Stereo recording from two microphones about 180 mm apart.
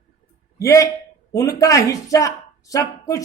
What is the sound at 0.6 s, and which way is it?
Speech, 15° left (ahead or behind).